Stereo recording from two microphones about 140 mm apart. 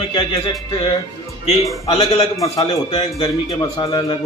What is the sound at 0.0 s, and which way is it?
Speech, 45° left (ahead or behind).